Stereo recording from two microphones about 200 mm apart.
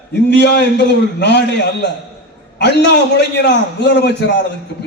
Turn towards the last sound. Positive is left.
turn(degrees=55)  # may be behind; listen again after turning